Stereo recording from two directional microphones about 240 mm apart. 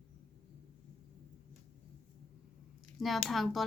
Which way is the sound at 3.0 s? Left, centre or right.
Centre.